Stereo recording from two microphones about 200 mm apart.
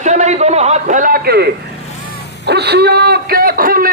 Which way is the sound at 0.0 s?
35° right (ahead or behind).